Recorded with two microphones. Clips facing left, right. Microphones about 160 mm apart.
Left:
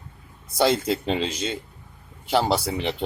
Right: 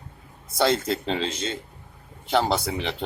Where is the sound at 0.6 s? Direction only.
10° left (ahead or behind).